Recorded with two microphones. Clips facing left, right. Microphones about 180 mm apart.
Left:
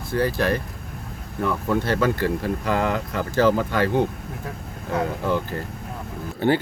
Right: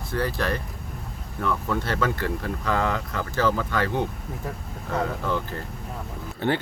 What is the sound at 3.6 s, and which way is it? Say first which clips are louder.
Speech: left 4 dB; 55° left (ahead or behind).